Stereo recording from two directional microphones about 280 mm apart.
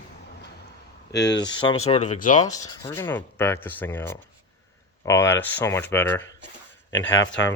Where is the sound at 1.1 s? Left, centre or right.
Centre.